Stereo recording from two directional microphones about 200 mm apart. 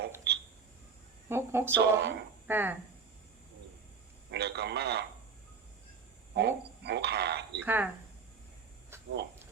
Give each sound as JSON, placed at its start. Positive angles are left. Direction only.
{"t": 0.3, "sound": "a sound", "side_deg": -55}
{"t": 1.3, "sound": "speech", "side_deg": -10}
{"t": 1.8, "sound": "speech", "side_deg": -55}
{"t": 2.5, "sound": "speech", "side_deg": -10}
{"t": 4.3, "sound": "speech", "side_deg": -55}
{"t": 6.3, "sound": "speech", "side_deg": -55}
{"t": 7.6, "sound": "speech", "side_deg": -10}
{"t": 8.9, "sound": "a sound", "side_deg": -10}